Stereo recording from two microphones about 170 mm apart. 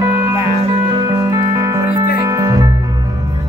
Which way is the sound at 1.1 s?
20° right (ahead or behind).